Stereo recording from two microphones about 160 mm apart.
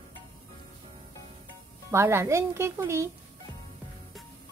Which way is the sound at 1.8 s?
15° right (ahead or behind).